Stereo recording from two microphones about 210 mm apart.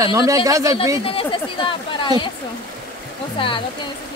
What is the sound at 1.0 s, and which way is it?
Speech, 25° left (ahead or behind).